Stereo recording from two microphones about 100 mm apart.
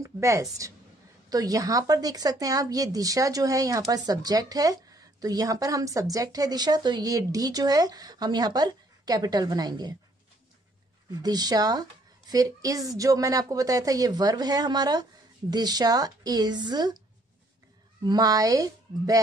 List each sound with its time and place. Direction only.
0.0 s speech: 30° right (ahead or behind)
11.1 s a woman's voice: 40° right (ahead or behind)
18.0 s speech: 40° right (ahead or behind)